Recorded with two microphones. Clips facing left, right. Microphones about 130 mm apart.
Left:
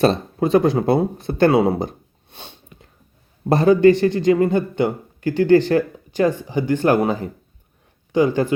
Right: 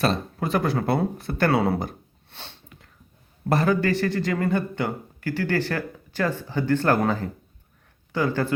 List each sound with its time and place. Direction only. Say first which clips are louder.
0.0 s a man's voice: left 7 dB; 25° left (ahead or behind)